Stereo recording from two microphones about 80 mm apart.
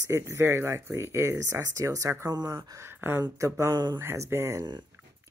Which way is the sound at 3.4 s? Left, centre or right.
Right.